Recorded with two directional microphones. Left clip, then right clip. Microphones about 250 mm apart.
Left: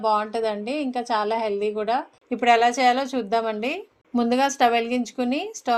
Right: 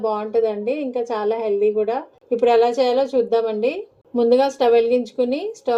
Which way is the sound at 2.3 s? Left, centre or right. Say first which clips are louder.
Right 3 dB; left.